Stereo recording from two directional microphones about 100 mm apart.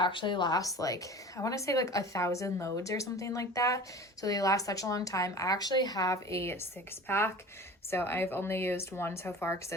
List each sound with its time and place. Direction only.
0.0 s a woman's voice: 55° left (ahead or behind)
6.3 s speech: 25° left (ahead or behind)